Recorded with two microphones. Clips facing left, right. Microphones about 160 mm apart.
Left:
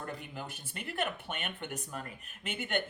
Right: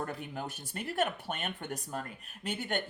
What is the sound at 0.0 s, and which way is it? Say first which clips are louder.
Speech: right 4 dB; 45° right (ahead or behind).